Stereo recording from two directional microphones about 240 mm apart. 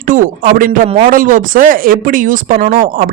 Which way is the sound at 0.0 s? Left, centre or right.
Right.